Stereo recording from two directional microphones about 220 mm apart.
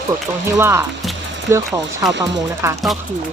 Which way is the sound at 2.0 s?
15° right (ahead or behind).